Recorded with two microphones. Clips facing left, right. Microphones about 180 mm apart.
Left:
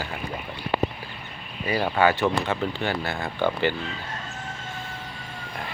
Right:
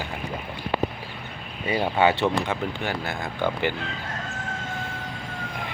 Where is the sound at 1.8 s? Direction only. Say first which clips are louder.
Even; 20° right (ahead or behind).